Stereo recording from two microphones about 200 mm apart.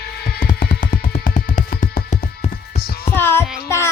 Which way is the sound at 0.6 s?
45° left (ahead or behind).